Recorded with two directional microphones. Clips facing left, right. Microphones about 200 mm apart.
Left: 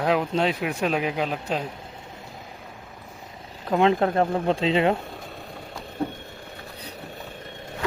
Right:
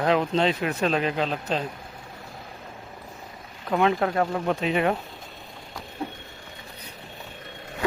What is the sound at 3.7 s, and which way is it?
Speech, 25° left (ahead or behind).